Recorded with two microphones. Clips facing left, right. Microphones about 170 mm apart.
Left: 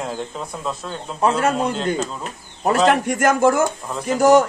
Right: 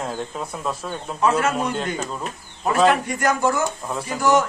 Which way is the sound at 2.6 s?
50° left (ahead or behind).